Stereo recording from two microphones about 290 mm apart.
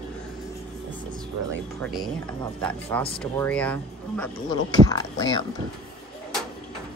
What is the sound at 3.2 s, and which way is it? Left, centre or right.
Speech, centre.